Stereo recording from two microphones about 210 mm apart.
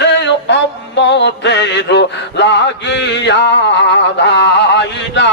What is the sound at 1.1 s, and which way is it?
Mantra, 55° left (ahead or behind).